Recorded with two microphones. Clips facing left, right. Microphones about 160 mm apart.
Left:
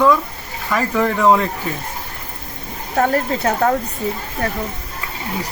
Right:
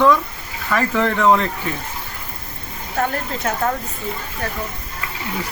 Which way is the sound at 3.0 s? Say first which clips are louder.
Left 5 dB; 45° left (ahead or behind).